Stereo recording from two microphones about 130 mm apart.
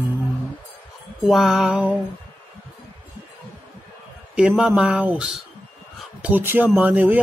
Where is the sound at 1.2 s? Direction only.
Centre (ahead or behind).